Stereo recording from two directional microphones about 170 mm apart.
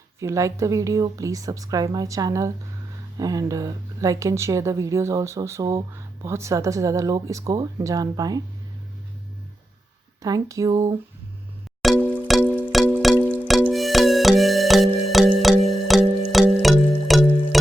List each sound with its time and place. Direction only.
0.2 s speech: 20° right (ahead or behind)
10.2 s speech: 20° right (ahead or behind)
11.8 s music: centre (ahead or behind)